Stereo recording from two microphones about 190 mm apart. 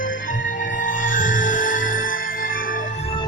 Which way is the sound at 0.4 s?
45° left (ahead or behind).